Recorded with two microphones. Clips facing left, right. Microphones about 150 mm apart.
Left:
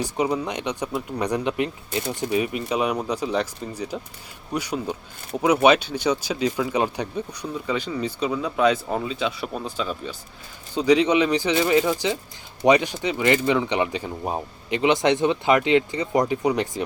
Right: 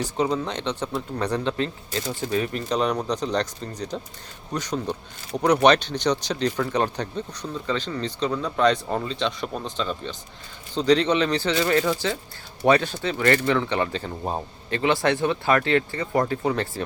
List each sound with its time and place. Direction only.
0.0 s speech: 10° left (ahead or behind)